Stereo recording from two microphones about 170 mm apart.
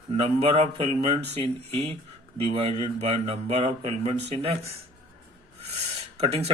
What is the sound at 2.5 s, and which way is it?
A man's voice, 35° right (ahead or behind).